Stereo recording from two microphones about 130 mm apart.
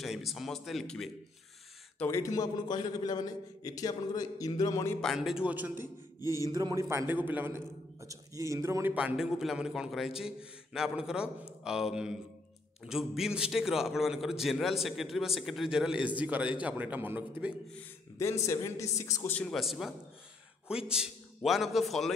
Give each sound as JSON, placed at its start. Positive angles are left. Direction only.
{"t": 0.0, "sound": "a man's voice", "side_deg": 0}
{"t": 2.0, "sound": "a man's voice", "side_deg": 20}
{"t": 5.0, "sound": "a man's voice", "side_deg": -5}
{"t": 6.4, "sound": "a man's voice", "side_deg": -25}
{"t": 8.9, "sound": "a man's voice", "side_deg": -5}
{"t": 18.1, "sound": "a man's voice", "side_deg": 20}
{"t": 19.3, "sound": "a man's voice", "side_deg": 5}